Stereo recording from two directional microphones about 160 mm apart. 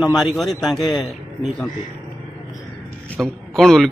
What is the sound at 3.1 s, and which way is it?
Speech, centre (ahead or behind).